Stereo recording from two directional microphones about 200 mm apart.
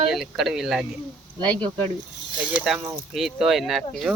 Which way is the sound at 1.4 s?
20° right (ahead or behind).